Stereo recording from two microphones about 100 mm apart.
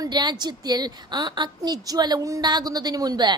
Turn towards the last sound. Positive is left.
turn(degrees=-45)  # may be behind; listen again after turning